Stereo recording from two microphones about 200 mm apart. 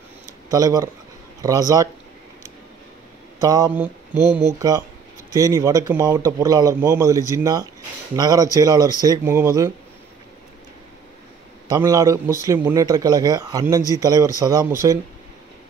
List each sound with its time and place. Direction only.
0.5 s speech: 20° right (ahead or behind)
3.3 s speech: 20° right (ahead or behind)
11.7 s speech: 20° right (ahead or behind)